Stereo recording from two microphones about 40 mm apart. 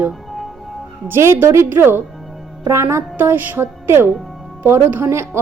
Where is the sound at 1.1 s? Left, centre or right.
Right.